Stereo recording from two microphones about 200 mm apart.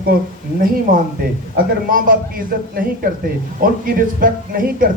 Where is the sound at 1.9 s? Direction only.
45° right (ahead or behind).